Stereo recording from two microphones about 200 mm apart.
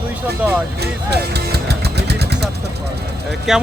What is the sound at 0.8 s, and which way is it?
Music, 55° right (ahead or behind).